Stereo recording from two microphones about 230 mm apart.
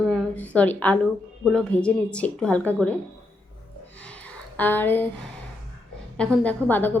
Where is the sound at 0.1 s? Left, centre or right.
Centre.